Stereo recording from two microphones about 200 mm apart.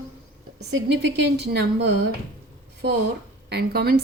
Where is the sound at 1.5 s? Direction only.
55° right (ahead or behind).